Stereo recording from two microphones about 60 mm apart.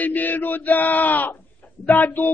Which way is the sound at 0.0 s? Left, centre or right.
Left.